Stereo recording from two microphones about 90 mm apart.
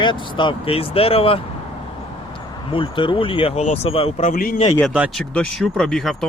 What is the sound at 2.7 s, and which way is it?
Speech, 75° left (ahead or behind).